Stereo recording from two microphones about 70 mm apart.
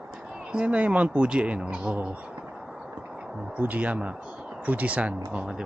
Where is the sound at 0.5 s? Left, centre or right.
Centre.